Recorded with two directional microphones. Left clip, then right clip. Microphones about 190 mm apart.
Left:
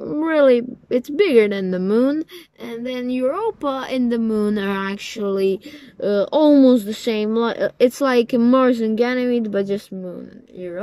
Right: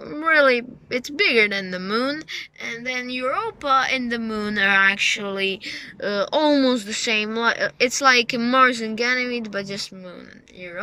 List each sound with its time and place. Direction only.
0.0 s speech: 30° left (ahead or behind)